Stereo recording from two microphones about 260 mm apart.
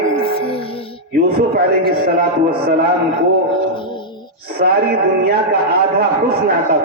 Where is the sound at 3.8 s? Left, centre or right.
Centre.